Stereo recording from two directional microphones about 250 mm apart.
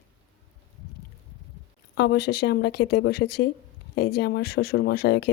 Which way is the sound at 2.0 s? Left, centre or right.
Left.